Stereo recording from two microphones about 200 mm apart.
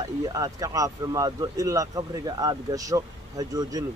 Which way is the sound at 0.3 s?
15° right (ahead or behind).